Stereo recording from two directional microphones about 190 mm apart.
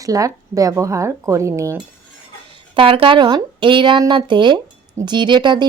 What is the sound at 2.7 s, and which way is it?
A woman's voice, 25° right (ahead or behind).